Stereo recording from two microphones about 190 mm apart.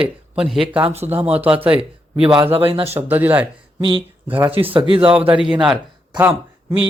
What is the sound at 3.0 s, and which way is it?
Speech, 10° right (ahead or behind).